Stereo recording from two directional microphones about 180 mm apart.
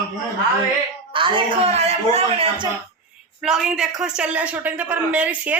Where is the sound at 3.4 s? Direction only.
5° right (ahead or behind).